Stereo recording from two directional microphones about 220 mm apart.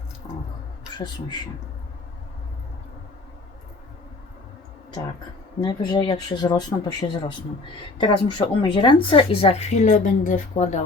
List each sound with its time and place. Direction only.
5.5 s a woman's voice: 20° left (ahead or behind)